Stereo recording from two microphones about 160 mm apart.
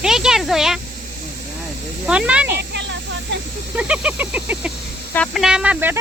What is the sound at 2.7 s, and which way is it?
Snake, 90° right.